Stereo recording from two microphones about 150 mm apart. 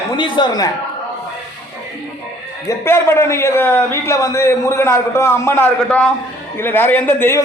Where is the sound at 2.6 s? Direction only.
15° left (ahead or behind).